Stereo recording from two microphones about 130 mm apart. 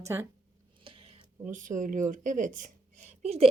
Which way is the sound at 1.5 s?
80° right.